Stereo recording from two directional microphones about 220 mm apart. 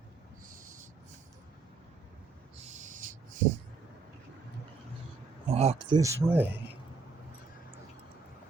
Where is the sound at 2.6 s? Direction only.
30° right (ahead or behind).